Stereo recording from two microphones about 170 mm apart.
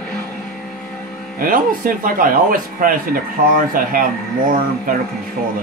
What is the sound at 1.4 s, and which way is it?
Speech, 55° right (ahead or behind).